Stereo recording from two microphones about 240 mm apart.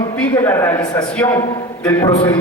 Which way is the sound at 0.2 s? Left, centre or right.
Centre.